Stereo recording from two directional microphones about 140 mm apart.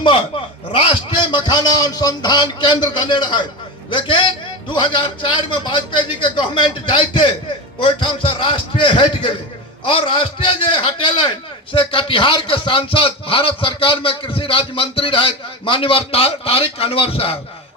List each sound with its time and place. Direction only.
0.7 s speech: 40° left (ahead or behind)
8.4 s speech: 35° left (ahead or behind)